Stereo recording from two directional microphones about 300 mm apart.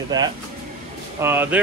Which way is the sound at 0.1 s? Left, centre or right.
Centre.